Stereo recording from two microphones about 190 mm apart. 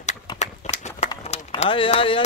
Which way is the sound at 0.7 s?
35° left (ahead or behind).